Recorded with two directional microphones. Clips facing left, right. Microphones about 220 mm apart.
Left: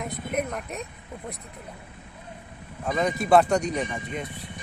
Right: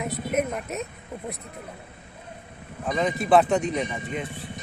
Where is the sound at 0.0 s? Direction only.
5° right (ahead or behind).